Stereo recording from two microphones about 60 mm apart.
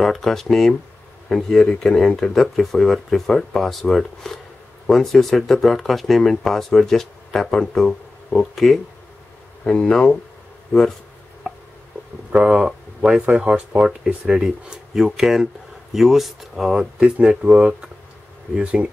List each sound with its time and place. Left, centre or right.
0.0 s speech: centre
9.7 s speech: centre
12.3 s speech: centre